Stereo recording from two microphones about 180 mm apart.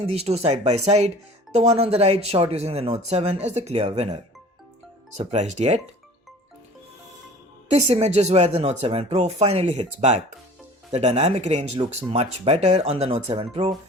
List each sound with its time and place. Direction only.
0.1 s speech: 35° right (ahead or behind)
5.1 s speech: 40° right (ahead or behind)
7.7 s speech: 35° right (ahead or behind)